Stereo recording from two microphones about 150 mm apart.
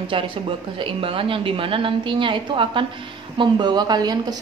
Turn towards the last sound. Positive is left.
turn(degrees=-25)  # may be behind; listen again after turning